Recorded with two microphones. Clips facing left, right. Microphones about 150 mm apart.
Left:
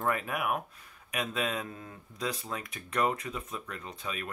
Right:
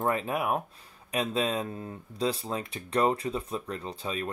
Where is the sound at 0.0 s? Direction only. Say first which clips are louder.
Right 3 dB; 25° right (ahead or behind).